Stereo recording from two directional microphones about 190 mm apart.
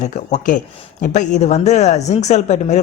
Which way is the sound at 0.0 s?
40° left (ahead or behind).